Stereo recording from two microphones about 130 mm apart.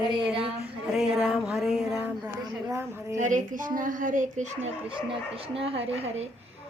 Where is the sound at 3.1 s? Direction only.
80° right.